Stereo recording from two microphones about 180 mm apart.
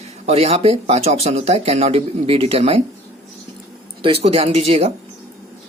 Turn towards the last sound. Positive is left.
turn(degrees=-35)  # may be behind; listen again after turning